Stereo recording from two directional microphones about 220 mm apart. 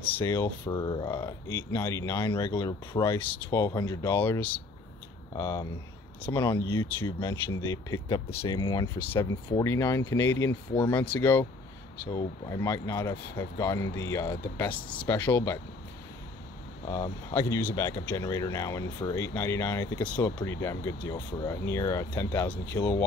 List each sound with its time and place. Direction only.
0.1 s speech: 10° left (ahead or behind)
10.7 s speech: 20° left (ahead or behind)
11.1 s speech: 10° left (ahead or behind)
16.9 s speech: 15° left (ahead or behind)